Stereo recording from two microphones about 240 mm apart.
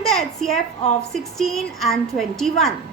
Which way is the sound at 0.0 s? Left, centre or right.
Centre.